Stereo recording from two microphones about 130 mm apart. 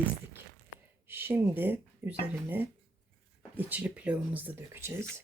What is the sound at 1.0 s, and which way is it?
Speech, 15° right (ahead or behind).